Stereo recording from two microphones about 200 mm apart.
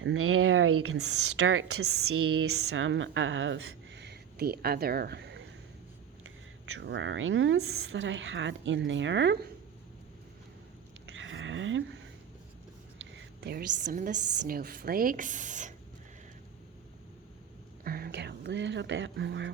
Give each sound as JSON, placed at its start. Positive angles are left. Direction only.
{"t": 0.0, "sound": "speech", "side_deg": -90}
{"t": 6.7, "sound": "speech", "side_deg": -65}
{"t": 11.1, "sound": "a sound", "side_deg": -70}
{"t": 13.0, "sound": "a woman's voice", "side_deg": -55}
{"t": 17.8, "sound": "whispering", "side_deg": -50}